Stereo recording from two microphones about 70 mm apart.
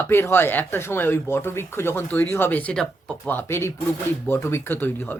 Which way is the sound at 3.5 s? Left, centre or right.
Left.